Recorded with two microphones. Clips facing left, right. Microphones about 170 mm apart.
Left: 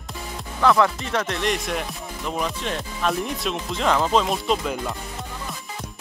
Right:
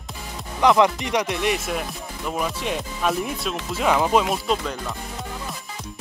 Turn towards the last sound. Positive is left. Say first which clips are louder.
# left 1 dB
turn(degrees=0)  # may be behind; listen again after turning